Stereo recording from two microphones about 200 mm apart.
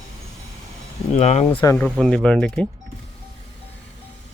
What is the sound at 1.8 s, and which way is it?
Speech, centre (ahead or behind).